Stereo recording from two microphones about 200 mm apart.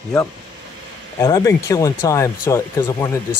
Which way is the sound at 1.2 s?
15° left (ahead or behind).